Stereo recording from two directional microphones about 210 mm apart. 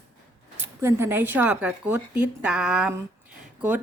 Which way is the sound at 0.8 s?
10° right (ahead or behind).